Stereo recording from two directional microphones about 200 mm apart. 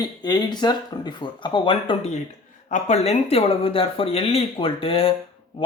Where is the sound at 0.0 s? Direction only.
20° left (ahead or behind).